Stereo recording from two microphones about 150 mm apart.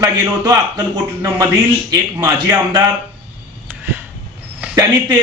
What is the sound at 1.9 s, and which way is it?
Speech, 25° right (ahead or behind).